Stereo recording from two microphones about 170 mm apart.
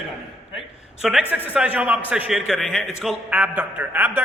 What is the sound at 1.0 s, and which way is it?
A man's voice, centre (ahead or behind).